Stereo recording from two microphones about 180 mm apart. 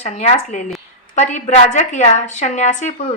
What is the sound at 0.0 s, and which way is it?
A woman's voice, 40° left (ahead or behind).